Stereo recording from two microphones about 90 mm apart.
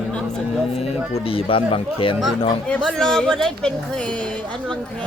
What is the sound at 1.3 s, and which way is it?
Speech, 90° left.